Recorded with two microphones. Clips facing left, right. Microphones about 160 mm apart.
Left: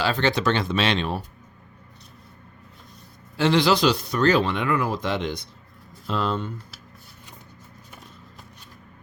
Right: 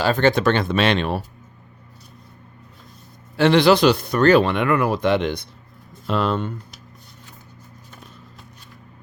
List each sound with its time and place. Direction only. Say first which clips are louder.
0.0 s speech: right 5 dB; 50° right (ahead or behind)
3.3 s speech: right 5 dB; 60° right (ahead or behind)